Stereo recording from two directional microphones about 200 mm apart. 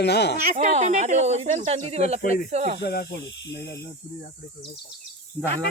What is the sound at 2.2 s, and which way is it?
Speech, 45° left (ahead or behind).